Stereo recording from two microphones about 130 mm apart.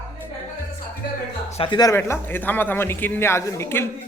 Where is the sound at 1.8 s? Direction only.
20° left (ahead or behind).